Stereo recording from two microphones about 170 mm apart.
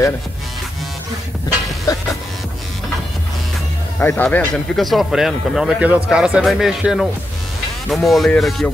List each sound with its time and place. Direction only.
1.9 s music: 20° left (ahead or behind)
4.0 s a man's voice: 10° left (ahead or behind)